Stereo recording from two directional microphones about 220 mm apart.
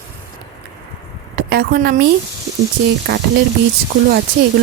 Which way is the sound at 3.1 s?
45° right (ahead or behind).